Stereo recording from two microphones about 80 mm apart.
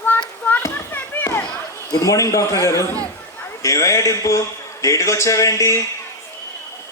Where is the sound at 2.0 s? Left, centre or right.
Left.